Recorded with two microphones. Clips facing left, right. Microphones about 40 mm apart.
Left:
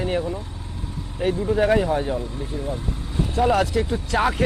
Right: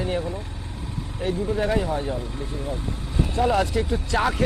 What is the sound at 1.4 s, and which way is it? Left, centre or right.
Speech, centre.